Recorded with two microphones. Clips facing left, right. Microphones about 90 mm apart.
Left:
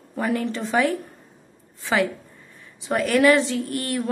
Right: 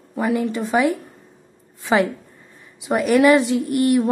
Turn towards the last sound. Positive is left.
turn(degrees=-20)  # may be behind; listen again after turning